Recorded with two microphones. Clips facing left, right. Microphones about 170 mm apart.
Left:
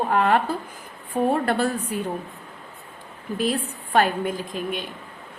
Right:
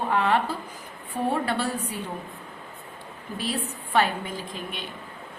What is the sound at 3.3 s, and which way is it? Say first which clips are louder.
A woman's voice: left 6 dB; 50° left (ahead or behind).